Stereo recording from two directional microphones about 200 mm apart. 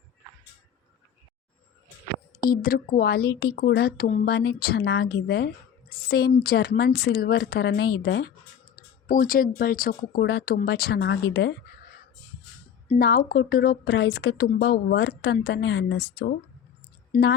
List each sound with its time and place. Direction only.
2.4 s speech: 45° left (ahead or behind)
8.7 s speech: 45° left (ahead or behind)
13.0 s speech: 50° left (ahead or behind)
17.1 s speech: 40° left (ahead or behind)